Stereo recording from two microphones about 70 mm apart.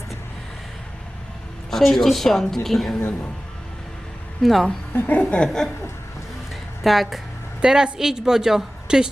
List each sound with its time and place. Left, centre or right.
1.7 s a woman's voice: centre
4.4 s a woman's voice: centre
4.9 s speech: left
5.2 s chuckle: centre
5.5 s a woman's voice: centre
6.5 s a sound: centre
7.6 s speech: centre